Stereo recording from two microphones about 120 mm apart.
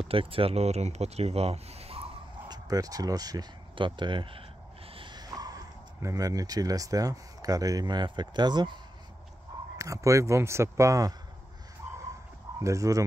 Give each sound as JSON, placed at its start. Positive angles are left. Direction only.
{"t": 0.1, "sound": "speech", "side_deg": -50}
{"t": 2.4, "sound": "speech", "side_deg": -35}
{"t": 9.8, "sound": "speech", "side_deg": -25}
{"t": 12.5, "sound": "speech", "side_deg": -25}